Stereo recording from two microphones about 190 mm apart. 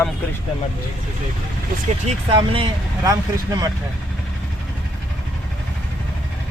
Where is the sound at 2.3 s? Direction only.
25° right (ahead or behind).